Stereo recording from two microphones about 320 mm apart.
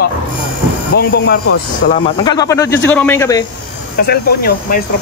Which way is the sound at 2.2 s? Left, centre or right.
Centre.